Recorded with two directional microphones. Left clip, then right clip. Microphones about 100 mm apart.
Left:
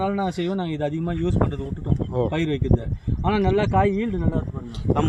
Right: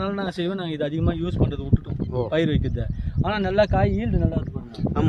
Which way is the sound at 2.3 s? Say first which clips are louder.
Right 1 dB; 55° right (ahead or behind).